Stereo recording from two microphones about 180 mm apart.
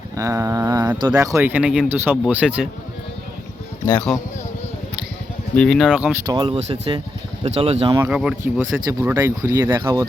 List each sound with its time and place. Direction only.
0.2 s speech: 15° right (ahead or behind)
3.8 s speech: 10° left (ahead or behind)
5.5 s speech: centre (ahead or behind)
6.2 s speech: 25° right (ahead or behind)
7.9 s speech: 10° right (ahead or behind)
8.7 s speech: 15° right (ahead or behind)